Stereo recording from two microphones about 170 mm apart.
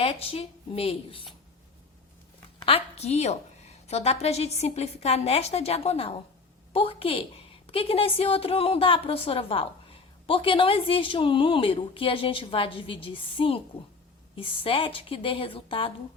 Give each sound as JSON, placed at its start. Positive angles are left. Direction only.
{"t": 0.0, "sound": "a woman's voice", "side_deg": 35}
{"t": 2.6, "sound": "a woman's voice", "side_deg": 35}